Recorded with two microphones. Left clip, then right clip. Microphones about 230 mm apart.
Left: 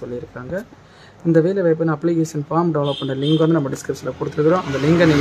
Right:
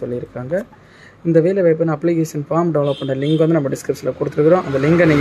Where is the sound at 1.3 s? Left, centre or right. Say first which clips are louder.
Right 3 dB; centre.